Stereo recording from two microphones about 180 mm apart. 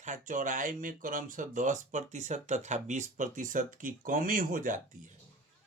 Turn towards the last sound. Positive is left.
turn(degrees=-50)  # may be behind; listen again after turning